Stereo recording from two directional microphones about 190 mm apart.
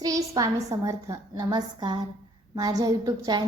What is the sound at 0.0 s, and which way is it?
A woman's voice, 15° right (ahead or behind).